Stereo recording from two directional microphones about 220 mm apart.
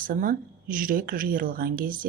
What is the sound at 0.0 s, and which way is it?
A woman's voice, 40° right (ahead or behind).